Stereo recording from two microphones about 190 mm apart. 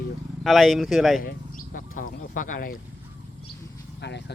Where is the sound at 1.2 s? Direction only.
45° left (ahead or behind).